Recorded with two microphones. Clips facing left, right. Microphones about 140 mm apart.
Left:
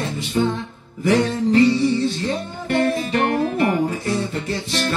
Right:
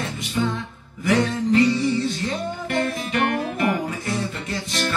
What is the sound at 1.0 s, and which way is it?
Music, 35° left (ahead or behind).